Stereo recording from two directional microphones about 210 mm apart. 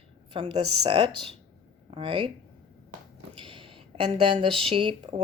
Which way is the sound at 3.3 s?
25° right (ahead or behind).